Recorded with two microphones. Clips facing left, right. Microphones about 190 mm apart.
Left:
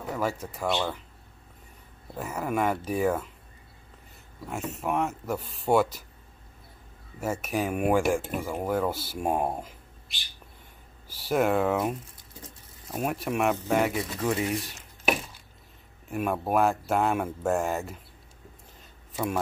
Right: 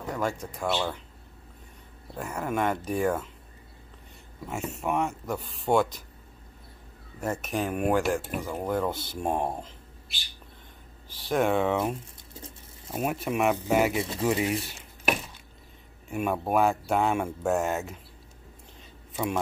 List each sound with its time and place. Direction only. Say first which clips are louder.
0.1 s speech: even; 5° left (ahead or behind)
2.1 s speech: left 1 dB; 5° left (ahead or behind)
4.5 s speech: even; centre (ahead or behind)
7.2 s speech: left 1 dB; 5° left (ahead or behind)
11.1 s speech: left 1 dB; 10° left (ahead or behind)
12.4 s a sound: right 2 dB; 30° right (ahead or behind)
12.9 s speech: even; centre (ahead or behind)
16.1 s speech: even; centre (ahead or behind)
19.1 s speech: even; 5° left (ahead or behind)